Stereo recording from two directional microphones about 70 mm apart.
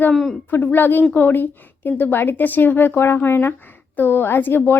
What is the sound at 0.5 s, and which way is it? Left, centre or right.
A woman's voice, left.